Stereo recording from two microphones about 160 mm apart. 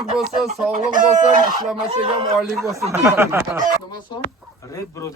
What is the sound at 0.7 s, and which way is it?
Chicken, 55° right (ahead or behind).